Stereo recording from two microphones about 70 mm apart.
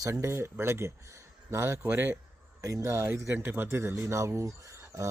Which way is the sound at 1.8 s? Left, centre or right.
Right.